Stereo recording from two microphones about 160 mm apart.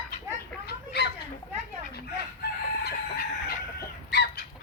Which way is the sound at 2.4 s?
90° left.